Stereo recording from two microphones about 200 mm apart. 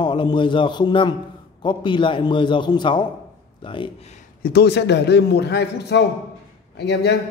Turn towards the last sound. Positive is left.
turn(degrees=55)  # may be behind; listen again after turning